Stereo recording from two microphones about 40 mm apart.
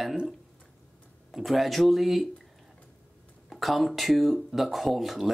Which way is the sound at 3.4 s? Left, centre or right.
Centre.